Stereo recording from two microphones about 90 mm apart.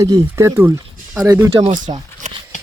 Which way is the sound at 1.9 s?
90° right.